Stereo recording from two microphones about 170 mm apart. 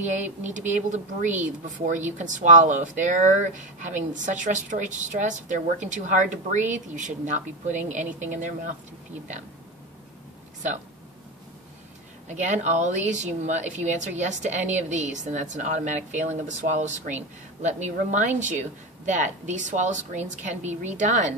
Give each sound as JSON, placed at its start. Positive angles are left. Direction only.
{"t": 0.0, "sound": "a woman's voice", "side_deg": -45}
{"t": 12.3, "sound": "a woman's voice", "side_deg": -45}